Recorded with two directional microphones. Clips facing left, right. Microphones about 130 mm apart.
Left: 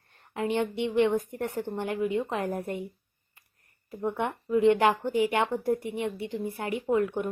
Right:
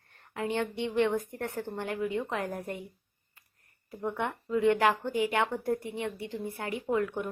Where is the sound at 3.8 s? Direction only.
20° left (ahead or behind).